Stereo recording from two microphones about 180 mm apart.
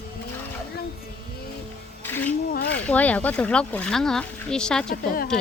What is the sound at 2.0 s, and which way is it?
Music, 10° left (ahead or behind).